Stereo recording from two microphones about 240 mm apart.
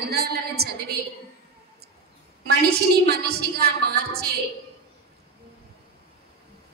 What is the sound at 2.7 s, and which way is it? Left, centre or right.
A woman's voice, right.